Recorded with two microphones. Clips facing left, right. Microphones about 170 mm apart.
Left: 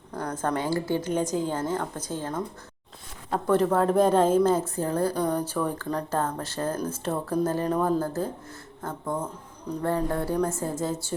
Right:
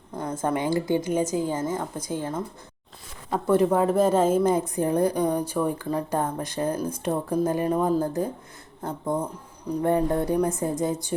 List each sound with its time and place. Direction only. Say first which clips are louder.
0.1 s a woman's voice: right 2 dB; 5° right (ahead or behind)